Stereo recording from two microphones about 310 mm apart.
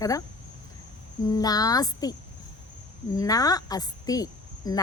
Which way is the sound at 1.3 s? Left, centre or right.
Centre.